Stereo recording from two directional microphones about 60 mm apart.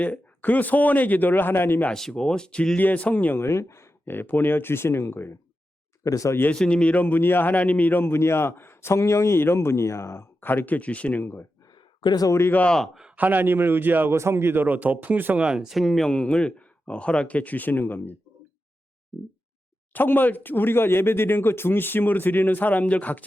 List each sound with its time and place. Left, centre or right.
0.0 s speech: left
1.9 s speech: centre; by 3.3 s left
3.3 s speech: left
6.0 s speech: left
6.6 s speech: centre; by 10.2 s left
10.4 s speech: left
11.2 s speech: left
12.6 s speech: centre
12.9 s speech: centre
13.1 s speech: right
14.1 s speech: right
15.4 s speech: centre
16.0 s speech: centre; by 18.1 s left
19.9 s speech: left